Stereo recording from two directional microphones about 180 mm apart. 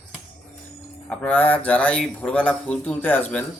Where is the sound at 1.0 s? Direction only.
5° left (ahead or behind).